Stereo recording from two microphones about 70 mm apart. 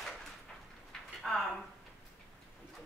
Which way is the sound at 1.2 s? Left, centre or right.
Centre.